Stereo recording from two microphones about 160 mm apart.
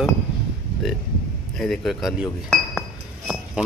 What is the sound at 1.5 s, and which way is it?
Speech, centre (ahead or behind).